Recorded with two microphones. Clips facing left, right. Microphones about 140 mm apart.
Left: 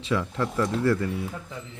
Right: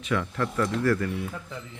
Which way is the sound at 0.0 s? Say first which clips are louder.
Left 1 dB; 25° left (ahead or behind).